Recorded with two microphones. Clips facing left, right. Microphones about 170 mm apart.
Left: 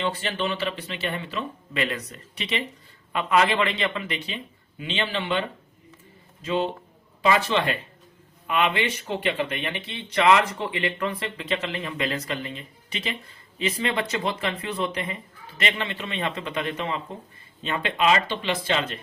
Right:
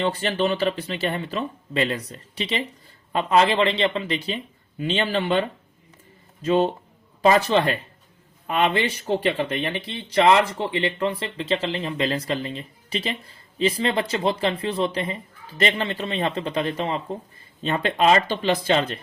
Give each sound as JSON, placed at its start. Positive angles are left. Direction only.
{"t": 0.0, "sound": "speech", "side_deg": -40}
{"t": 4.8, "sound": "speech", "side_deg": -40}